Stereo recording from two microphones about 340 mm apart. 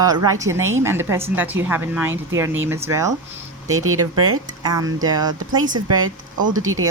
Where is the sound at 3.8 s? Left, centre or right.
Right.